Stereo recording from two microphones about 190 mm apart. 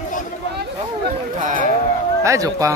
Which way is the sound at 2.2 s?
15° right (ahead or behind).